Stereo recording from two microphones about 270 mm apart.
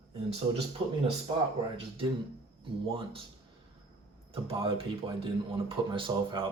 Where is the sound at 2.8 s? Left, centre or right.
Centre.